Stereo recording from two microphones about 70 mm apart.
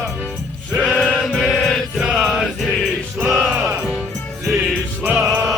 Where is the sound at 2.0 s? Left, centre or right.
Centre.